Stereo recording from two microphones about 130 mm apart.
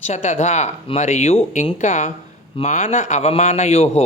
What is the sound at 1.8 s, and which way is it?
A woman's voice, 65° left (ahead or behind).